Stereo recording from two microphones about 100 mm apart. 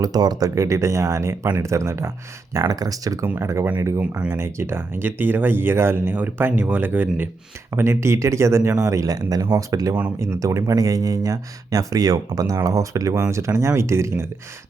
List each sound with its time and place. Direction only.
0.0 s speech: 40° right (ahead or behind)
3.2 s speech: 25° right (ahead or behind)
4.0 s speech: 10° right (ahead or behind)
4.3 s speech: 25° right (ahead or behind)